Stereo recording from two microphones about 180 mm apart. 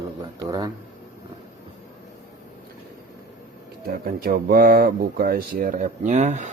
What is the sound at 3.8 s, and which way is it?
Speech, 55° right (ahead or behind).